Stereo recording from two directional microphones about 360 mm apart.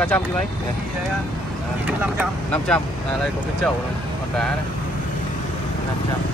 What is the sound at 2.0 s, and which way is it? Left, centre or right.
Speech, centre.